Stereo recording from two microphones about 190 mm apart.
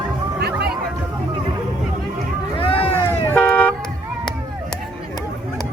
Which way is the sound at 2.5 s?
30° left (ahead or behind).